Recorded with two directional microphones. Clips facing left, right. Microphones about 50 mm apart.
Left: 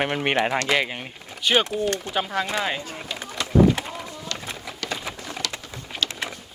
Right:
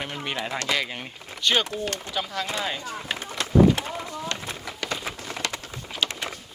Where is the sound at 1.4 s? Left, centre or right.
Centre.